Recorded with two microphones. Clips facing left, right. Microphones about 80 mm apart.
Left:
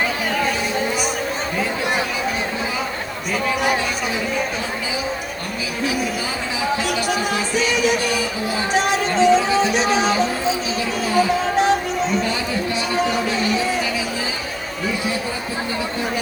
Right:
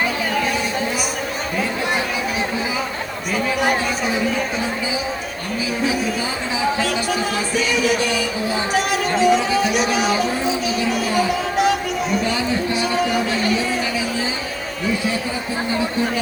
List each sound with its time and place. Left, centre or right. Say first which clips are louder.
8.7 s music: left 2 dB; left
11.5 s music: even; left